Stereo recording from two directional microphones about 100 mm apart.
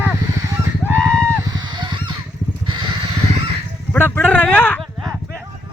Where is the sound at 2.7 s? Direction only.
55° right (ahead or behind).